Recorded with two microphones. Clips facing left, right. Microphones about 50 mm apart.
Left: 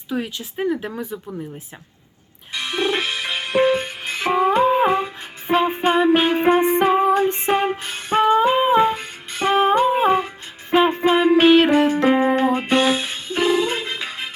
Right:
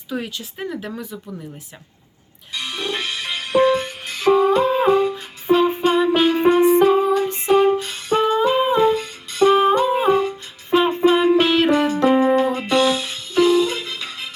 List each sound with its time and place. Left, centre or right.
0.1 s speech: centre
2.5 s music: left